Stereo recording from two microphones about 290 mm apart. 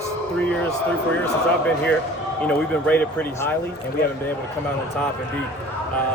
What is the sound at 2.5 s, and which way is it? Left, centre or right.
Speech, centre.